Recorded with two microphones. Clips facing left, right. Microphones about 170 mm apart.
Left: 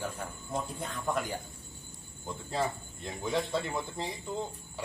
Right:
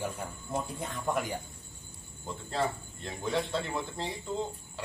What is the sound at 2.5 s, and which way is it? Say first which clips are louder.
Speech: right 1 dB; centre (ahead or behind).